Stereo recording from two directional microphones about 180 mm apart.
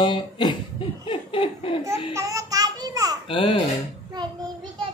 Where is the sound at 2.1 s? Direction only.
20° right (ahead or behind).